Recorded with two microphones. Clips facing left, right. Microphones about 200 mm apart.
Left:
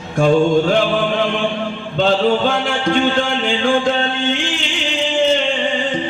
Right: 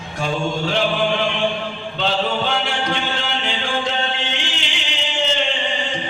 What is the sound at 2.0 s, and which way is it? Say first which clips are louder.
Mantra: left 7 dB; 50° left (ahead or behind).